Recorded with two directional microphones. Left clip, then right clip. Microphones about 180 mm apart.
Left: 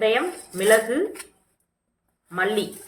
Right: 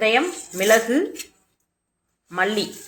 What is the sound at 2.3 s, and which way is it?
Speech, 40° right (ahead or behind).